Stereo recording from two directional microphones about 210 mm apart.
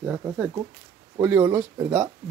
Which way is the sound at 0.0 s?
10° right (ahead or behind).